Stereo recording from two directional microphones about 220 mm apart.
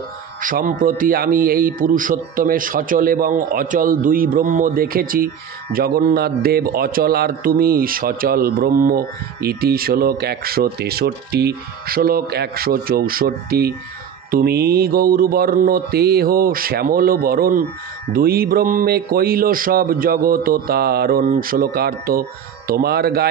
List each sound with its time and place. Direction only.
0.4 s a man's voice: 40° right (ahead or behind)